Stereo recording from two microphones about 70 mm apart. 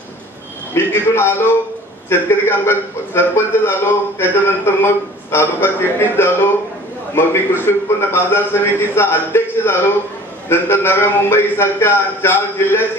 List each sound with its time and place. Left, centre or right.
0.7 s a man's voice: left